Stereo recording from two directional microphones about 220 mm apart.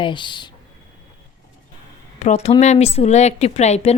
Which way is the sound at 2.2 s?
30° left (ahead or behind).